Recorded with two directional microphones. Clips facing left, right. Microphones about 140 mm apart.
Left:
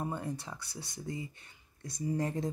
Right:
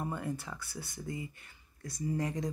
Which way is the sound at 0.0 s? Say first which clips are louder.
Even; 20° left (ahead or behind).